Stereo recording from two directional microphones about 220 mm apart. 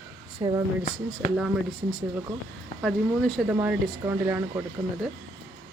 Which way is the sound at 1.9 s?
5° right (ahead or behind).